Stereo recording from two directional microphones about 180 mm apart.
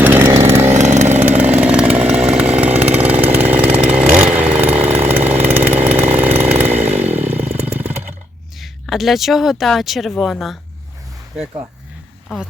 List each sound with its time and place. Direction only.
0.0 s chainsaw: 10° right (ahead or behind)
0.7 s vehicle: 40° right (ahead or behind)
1.3 s chainsaw: 10° right (ahead or behind)
8.5 s speech: centre (ahead or behind)